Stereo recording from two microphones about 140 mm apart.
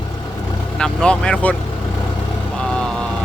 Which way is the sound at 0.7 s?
5° left (ahead or behind).